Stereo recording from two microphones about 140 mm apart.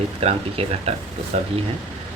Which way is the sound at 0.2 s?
45° right (ahead or behind).